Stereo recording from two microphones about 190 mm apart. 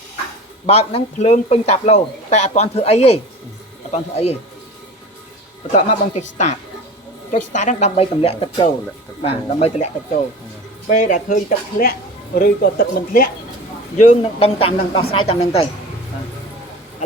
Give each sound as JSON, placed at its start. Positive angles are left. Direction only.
{"t": 0.7, "sound": "a man's voice", "side_deg": 35}
{"t": 5.7, "sound": "a man's voice", "side_deg": 35}
{"t": 14.3, "sound": "a woman's voice", "side_deg": 30}